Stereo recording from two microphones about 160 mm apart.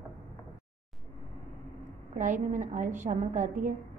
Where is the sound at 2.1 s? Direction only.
50° right (ahead or behind).